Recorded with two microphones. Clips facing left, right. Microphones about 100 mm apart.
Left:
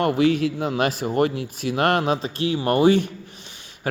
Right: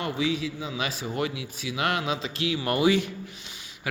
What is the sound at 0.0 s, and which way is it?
Speech, 60° left (ahead or behind).